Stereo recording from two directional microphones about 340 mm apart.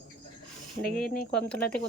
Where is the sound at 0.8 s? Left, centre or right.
Left.